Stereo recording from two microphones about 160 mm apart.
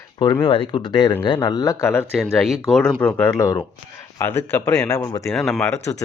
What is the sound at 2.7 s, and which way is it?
Speech, centre (ahead or behind).